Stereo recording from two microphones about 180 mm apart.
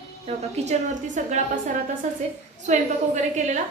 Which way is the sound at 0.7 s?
45° right (ahead or behind).